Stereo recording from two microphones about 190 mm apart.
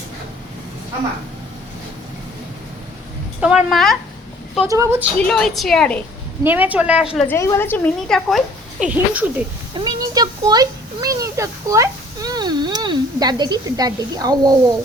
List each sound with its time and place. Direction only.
3.4 s a woman's voice: centre (ahead or behind)
4.7 s speech: 15° right (ahead or behind)
5.2 s a woman's voice: 5° left (ahead or behind)
6.4 s speech: 10° right (ahead or behind)
7.3 s a woman's voice: 15° left (ahead or behind)
8.8 s speech: 10° right (ahead or behind)
9.7 s a sound: 20° right (ahead or behind)